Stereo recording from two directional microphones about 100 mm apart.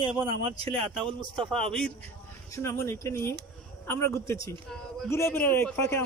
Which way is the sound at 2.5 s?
30° left (ahead or behind).